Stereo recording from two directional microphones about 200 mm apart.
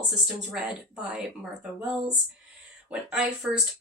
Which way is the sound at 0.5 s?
5° right (ahead or behind).